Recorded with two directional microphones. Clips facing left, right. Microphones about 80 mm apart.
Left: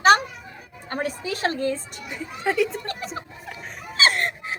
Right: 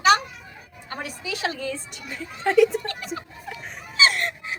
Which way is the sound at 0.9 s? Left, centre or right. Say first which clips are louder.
Left 5 dB; left.